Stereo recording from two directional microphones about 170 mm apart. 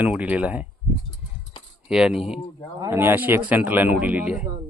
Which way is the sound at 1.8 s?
5° right (ahead or behind).